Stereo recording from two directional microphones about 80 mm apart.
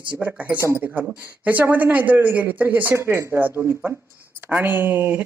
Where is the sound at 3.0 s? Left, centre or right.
Right.